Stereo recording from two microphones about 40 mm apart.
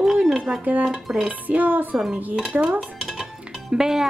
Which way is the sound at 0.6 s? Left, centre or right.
Right.